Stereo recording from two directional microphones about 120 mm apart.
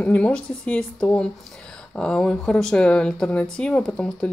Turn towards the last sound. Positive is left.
turn(degrees=5)  # may be behind; listen again after turning